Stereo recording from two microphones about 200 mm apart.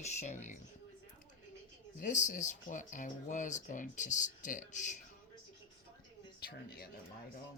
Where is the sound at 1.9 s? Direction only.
35° left (ahead or behind).